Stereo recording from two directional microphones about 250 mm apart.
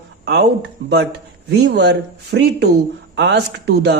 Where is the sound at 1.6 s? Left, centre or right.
Right.